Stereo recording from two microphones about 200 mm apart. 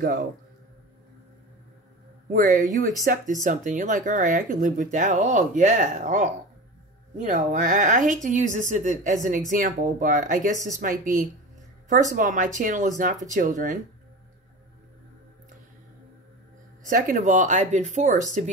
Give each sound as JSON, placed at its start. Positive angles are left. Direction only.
{"t": 2.3, "sound": "speech", "side_deg": -40}
{"t": 16.9, "sound": "speech", "side_deg": -40}